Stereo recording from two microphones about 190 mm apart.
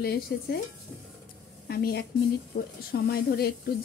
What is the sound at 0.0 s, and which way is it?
Speech, 55° left (ahead or behind).